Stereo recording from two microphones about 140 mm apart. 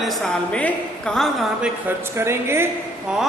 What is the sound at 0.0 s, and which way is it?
A woman's voice, centre (ahead or behind).